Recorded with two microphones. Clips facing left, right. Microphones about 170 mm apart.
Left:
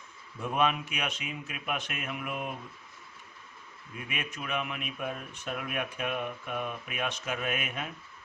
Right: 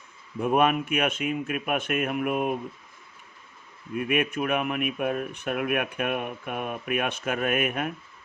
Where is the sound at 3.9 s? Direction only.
60° right (ahead or behind).